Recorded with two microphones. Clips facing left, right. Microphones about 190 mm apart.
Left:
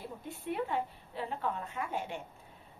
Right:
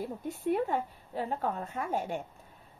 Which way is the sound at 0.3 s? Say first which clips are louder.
Right 5 dB; 45° right (ahead or behind).